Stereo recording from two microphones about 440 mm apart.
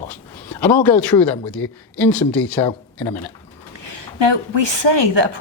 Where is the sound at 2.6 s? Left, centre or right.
Centre.